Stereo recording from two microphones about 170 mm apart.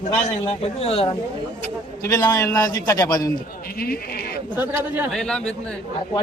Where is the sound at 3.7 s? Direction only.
65° left (ahead or behind).